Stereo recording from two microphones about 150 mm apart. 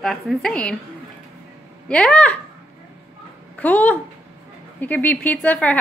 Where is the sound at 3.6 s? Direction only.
10° left (ahead or behind).